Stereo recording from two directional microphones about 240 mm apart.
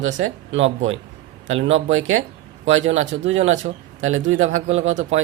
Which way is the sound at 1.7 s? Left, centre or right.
Right.